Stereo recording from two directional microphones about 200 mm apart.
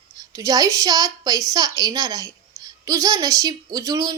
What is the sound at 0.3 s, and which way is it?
A woman's voice, 15° right (ahead or behind).